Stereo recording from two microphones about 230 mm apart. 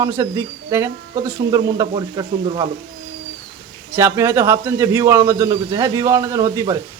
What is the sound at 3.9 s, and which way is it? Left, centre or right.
A man's voice, centre.